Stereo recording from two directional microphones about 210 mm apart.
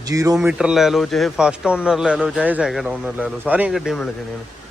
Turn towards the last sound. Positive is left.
turn(degrees=0)  # may be behind; listen again after turning